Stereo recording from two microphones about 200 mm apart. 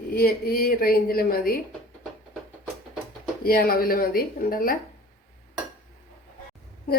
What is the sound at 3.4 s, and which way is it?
A woman's voice, 45° left (ahead or behind).